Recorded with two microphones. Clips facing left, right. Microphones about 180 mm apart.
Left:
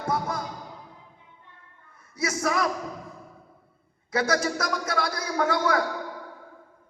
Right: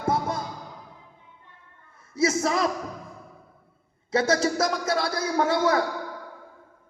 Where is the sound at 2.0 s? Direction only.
25° right (ahead or behind).